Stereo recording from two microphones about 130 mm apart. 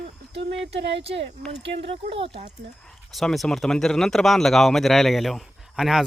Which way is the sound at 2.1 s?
50° right (ahead or behind).